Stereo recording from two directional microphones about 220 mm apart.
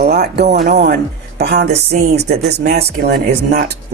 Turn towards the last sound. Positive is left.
turn(degrees=-45)  # may be behind; listen again after turning